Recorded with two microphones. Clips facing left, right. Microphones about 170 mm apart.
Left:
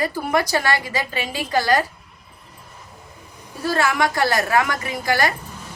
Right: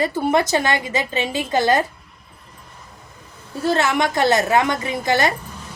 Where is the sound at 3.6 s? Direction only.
25° right (ahead or behind).